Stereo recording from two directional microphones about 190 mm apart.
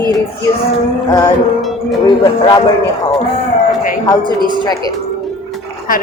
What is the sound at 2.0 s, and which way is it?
Speech, 25° left (ahead or behind).